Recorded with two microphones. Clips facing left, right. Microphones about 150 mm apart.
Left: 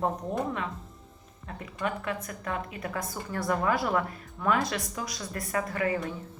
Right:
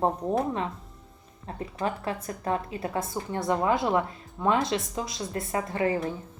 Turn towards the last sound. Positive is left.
turn(degrees=-30)  # may be behind; listen again after turning